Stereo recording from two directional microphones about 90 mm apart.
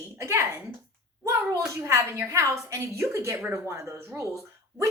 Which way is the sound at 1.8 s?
30° right (ahead or behind).